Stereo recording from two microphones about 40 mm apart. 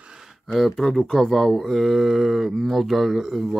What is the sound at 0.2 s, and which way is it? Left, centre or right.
Speech, centre.